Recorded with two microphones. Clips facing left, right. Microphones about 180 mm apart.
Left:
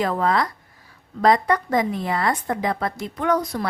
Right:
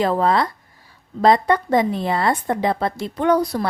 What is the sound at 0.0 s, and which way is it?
A woman's voice, 30° right (ahead or behind).